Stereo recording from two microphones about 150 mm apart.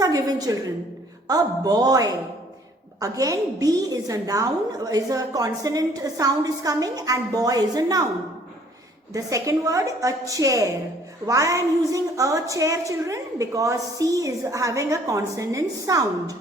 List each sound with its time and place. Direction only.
0.0 s a woman's voice: 25° right (ahead or behind)
9.1 s a woman's voice: 20° right (ahead or behind)